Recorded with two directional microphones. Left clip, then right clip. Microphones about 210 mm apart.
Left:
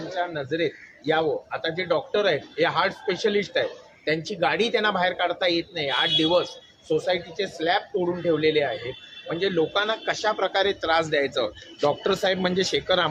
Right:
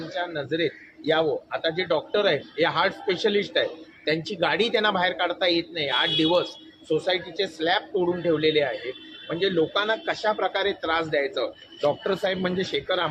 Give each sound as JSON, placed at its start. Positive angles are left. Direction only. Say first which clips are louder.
{"t": 0.1, "sound": "a man's voice", "louder": "left 1 dB", "side_deg": -5}
{"t": 9.7, "sound": "speech", "louder": "even", "side_deg": 15}
{"t": 10.1, "sound": "a man's voice", "louder": "even", "side_deg": 30}